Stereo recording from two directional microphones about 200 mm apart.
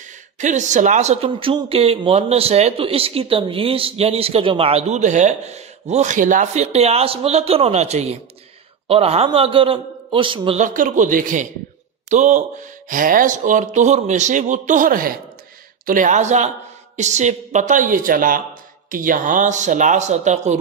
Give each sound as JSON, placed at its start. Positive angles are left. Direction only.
{"t": 0.4, "sound": "a man's voice", "side_deg": -35}
{"t": 10.6, "sound": "speech", "side_deg": -40}